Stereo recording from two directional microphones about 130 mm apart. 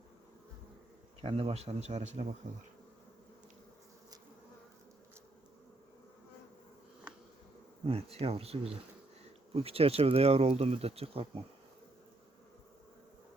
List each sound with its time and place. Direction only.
1.2 s speech: 45° right (ahead or behind)
7.9 s speech: 50° right (ahead or behind)